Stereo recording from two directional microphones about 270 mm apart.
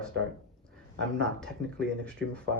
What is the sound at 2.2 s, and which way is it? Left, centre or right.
Speech, right.